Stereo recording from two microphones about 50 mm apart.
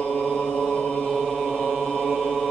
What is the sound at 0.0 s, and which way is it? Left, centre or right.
Chant, centre.